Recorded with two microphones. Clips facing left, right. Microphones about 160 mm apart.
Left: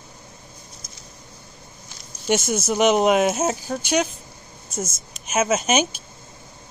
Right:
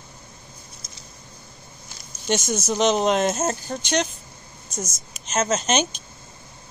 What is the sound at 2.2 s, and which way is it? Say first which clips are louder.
Speech: left 2 dB; 10° left (ahead or behind).